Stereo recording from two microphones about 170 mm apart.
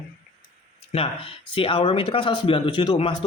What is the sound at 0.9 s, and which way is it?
Speech, 35° left (ahead or behind).